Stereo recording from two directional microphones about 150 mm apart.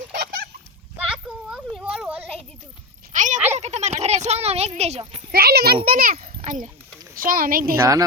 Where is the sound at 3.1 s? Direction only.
55° right (ahead or behind).